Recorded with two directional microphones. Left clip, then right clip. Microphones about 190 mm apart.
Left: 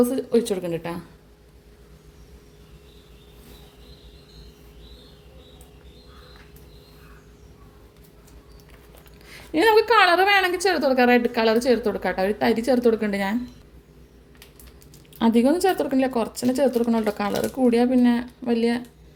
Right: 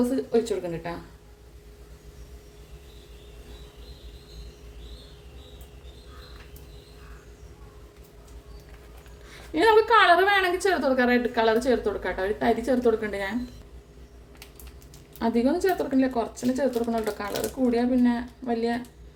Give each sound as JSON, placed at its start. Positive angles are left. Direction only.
{"t": 0.0, "sound": "speech", "side_deg": 40}
{"t": 9.5, "sound": "a woman's voice", "side_deg": 40}
{"t": 15.2, "sound": "speech", "side_deg": 45}